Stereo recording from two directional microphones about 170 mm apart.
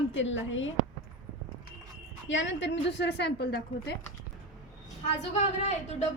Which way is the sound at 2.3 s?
90° left.